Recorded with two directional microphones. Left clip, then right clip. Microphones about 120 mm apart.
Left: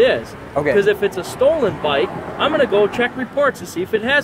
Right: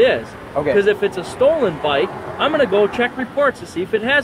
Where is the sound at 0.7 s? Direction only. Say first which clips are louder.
Right 1 dB; 35° left (ahead or behind).